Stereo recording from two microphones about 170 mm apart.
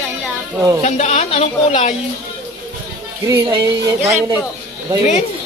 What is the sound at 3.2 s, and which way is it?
Speech, 20° right (ahead or behind).